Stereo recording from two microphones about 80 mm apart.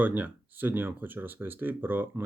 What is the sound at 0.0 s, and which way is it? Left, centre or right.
Speech, right.